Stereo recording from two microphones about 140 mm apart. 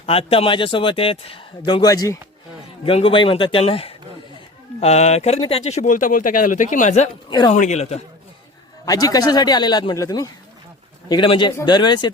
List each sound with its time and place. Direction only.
0.0 s speech: 45° left (ahead or behind); by 2.1 s 25° left (ahead or behind)
2.8 s speech: 40° left (ahead or behind); by 7.1 s 60° left (ahead or behind)
7.3 s speech: 35° left (ahead or behind)
7.5 s speech: 55° left (ahead or behind)
8.8 s a man's voice: 25° left (ahead or behind)